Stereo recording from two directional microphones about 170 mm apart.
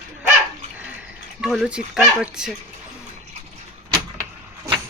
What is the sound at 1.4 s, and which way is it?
Speech, centre (ahead or behind).